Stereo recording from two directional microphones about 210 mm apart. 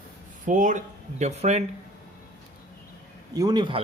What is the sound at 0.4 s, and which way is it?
Speech, 35° right (ahead or behind).